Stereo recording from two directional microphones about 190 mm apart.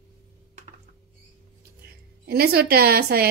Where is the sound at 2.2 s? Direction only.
55° right (ahead or behind).